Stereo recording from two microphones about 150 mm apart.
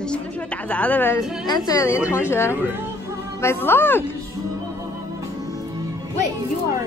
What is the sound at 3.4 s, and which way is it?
Speech, 15° left (ahead or behind).